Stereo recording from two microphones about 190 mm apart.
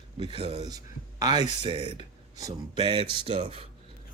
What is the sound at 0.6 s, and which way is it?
Speech, 20° right (ahead or behind).